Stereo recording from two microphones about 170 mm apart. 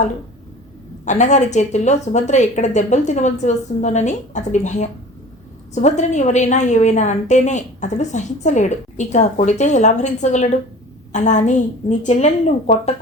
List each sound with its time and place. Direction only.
1.0 s a woman's voice: 45° left (ahead or behind)